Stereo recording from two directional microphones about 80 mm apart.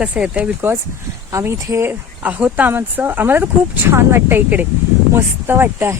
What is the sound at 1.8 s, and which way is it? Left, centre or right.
Speech, centre.